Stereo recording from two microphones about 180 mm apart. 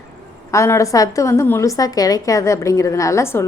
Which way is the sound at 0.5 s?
15° left (ahead or behind).